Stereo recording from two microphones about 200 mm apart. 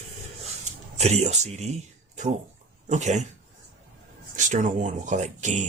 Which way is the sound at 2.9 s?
35° right (ahead or behind).